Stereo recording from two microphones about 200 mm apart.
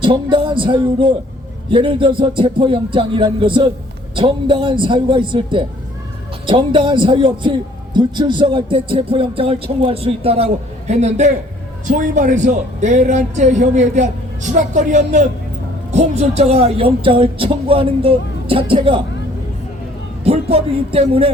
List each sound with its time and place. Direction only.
0.0 s a man's voice: 25° right (ahead or behind)
20.2 s speech: 30° right (ahead or behind)